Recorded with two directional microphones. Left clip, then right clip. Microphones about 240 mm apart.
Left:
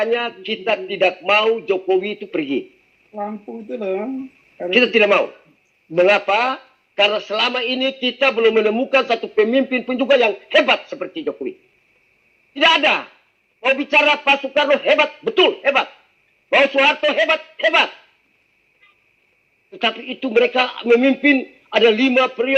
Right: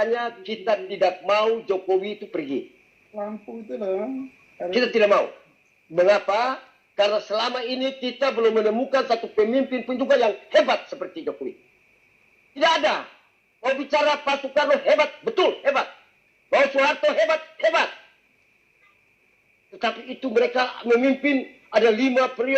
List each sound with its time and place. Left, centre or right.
0.0 s a man's voice: left
12.5 s a man's voice: left
19.7 s a man's voice: left